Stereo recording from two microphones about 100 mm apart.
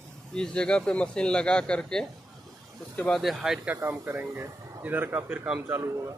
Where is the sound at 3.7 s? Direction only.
20° right (ahead or behind).